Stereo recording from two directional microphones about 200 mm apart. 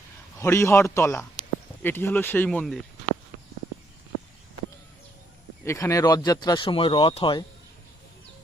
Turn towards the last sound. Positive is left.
turn(degrees=25)  # may be behind; listen again after turning